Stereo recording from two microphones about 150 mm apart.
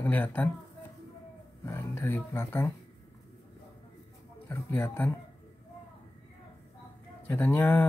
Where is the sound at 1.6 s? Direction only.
15° left (ahead or behind).